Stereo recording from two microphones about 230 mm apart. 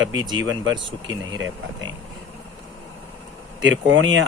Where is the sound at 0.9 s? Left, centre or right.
Centre.